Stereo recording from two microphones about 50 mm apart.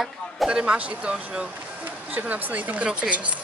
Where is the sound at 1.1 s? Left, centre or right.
Centre.